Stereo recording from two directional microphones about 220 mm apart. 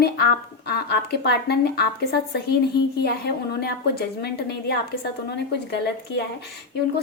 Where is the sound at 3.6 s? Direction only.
45° left (ahead or behind).